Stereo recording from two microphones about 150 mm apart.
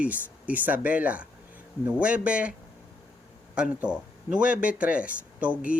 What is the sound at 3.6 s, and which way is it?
Speech, 5° right (ahead or behind).